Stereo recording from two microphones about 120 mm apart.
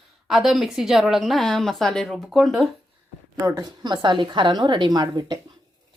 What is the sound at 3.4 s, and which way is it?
A woman's voice, 30° right (ahead or behind).